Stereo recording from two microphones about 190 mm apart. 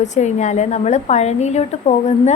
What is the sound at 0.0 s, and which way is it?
A woman's voice, 40° left (ahead or behind).